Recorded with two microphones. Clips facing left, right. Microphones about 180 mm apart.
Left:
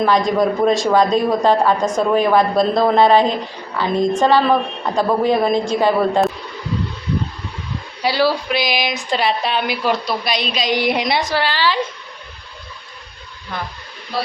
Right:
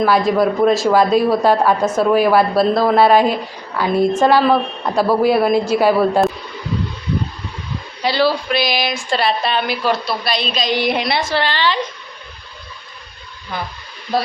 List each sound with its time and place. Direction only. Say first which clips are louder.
0.0 s speech: right 1 dB; 5° right (ahead or behind)
8.0 s a woman's voice: right 1 dB; 10° left (ahead or behind)
14.1 s speech: right 4 dB; 45° right (ahead or behind)